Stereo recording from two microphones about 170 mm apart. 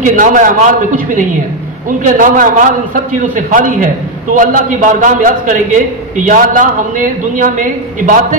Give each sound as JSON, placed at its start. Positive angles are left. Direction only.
{"t": 0.0, "sound": "a man's voice", "side_deg": -50}